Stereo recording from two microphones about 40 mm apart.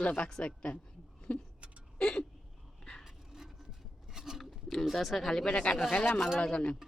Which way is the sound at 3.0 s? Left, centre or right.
Centre.